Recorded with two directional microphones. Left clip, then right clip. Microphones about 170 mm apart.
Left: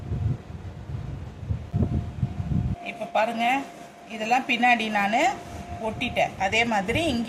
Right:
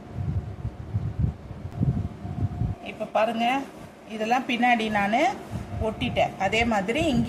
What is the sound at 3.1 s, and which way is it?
Speech, 20° right (ahead or behind).